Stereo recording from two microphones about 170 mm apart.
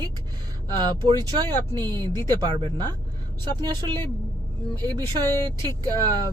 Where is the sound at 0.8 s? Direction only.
25° right (ahead or behind).